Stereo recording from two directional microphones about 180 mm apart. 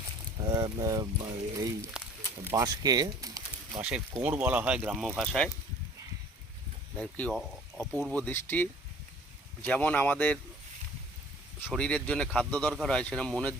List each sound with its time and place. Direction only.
0.4 s speech: 20° right (ahead or behind)
4.2 s speech: 10° right (ahead or behind)
7.0 s a man's voice: 5° left (ahead or behind)
11.7 s a man's voice: 5° left (ahead or behind)